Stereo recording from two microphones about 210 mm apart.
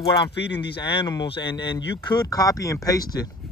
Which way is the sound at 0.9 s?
20° left (ahead or behind).